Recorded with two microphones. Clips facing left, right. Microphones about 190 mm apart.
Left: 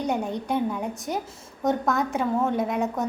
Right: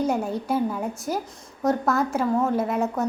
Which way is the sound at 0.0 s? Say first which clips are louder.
Right 2 dB; centre (ahead or behind).